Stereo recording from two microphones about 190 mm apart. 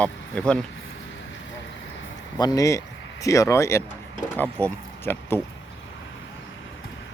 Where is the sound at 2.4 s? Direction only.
20° left (ahead or behind).